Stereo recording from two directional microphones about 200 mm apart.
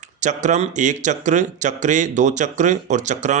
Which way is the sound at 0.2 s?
35° right (ahead or behind).